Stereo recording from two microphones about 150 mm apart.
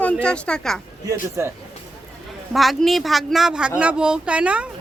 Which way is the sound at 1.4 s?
15° right (ahead or behind).